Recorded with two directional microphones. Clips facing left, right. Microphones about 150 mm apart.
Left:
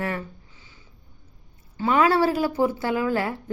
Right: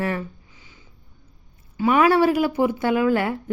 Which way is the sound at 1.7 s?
15° right (ahead or behind).